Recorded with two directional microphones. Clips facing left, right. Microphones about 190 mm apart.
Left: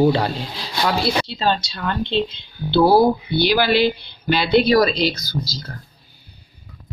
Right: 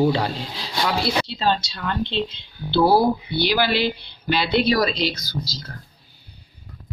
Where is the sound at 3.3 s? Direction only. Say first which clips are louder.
Left 5 dB; 50° left (ahead or behind).